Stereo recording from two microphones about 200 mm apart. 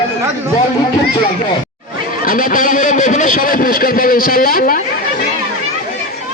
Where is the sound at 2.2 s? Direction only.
40° left (ahead or behind).